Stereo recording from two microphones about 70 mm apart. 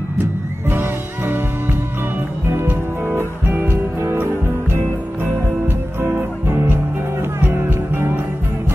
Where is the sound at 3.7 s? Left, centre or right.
Right.